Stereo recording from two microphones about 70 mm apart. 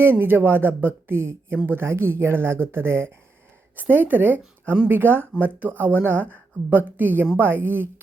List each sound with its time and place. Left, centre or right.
0.0 s a woman's voice: right